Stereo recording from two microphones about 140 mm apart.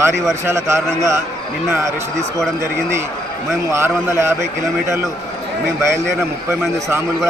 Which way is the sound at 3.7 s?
20° right (ahead or behind).